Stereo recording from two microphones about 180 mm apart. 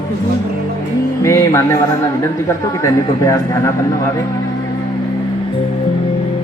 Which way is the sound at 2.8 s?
15° left (ahead or behind).